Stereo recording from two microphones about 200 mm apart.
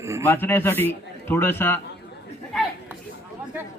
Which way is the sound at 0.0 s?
15° right (ahead or behind).